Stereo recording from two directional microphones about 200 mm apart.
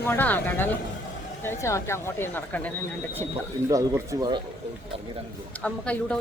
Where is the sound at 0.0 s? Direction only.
10° left (ahead or behind).